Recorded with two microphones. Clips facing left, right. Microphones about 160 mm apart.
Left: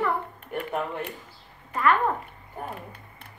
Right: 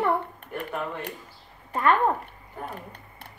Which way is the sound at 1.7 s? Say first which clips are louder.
Right 1 dB; 30° right (ahead or behind).